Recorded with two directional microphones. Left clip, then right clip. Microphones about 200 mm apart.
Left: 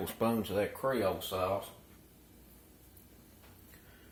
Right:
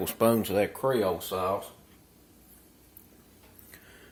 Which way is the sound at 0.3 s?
45° right (ahead or behind).